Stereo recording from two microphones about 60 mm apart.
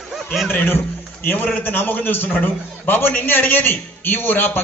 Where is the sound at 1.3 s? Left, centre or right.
Left.